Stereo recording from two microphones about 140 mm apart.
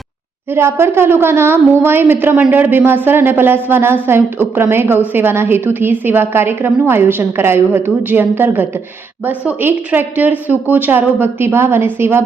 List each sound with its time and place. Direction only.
0.5 s a woman's voice: 15° right (ahead or behind)